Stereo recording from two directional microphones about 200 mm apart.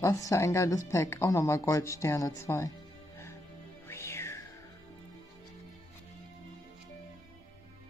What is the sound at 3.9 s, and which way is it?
Music, 15° left (ahead or behind).